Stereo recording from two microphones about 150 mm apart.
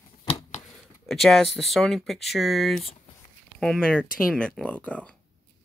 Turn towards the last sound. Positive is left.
turn(degrees=10)  # may be behind; listen again after turning